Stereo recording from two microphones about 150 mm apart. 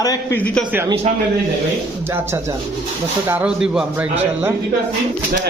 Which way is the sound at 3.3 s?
10° right (ahead or behind).